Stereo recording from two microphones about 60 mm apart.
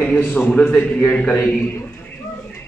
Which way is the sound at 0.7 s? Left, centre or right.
Left.